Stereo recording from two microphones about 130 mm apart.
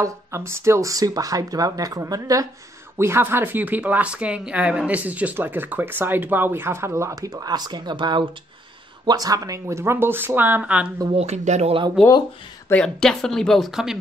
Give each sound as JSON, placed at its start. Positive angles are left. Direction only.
{"t": 0.0, "sound": "speech", "side_deg": -20}
{"t": 11.1, "sound": "speech", "side_deg": -55}
{"t": 12.6, "sound": "speech", "side_deg": 5}